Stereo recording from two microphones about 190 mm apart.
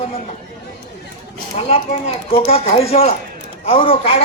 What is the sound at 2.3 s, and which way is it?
A man's voice, 30° left (ahead or behind).